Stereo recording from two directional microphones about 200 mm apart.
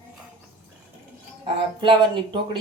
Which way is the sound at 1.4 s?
25° right (ahead or behind).